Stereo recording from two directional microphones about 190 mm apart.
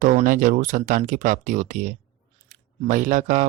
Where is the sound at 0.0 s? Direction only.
45° right (ahead or behind).